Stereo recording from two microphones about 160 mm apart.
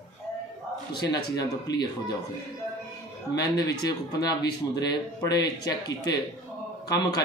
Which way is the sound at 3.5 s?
25° left (ahead or behind).